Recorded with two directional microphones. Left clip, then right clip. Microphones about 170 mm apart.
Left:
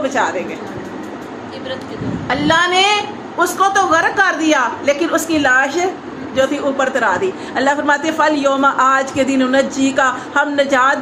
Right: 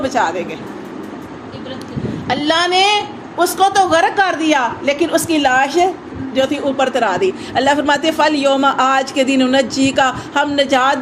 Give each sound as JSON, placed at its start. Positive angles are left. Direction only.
{"t": 0.0, "sound": "a woman's voice", "side_deg": -30}
{"t": 2.2, "sound": "a man's voice", "side_deg": -45}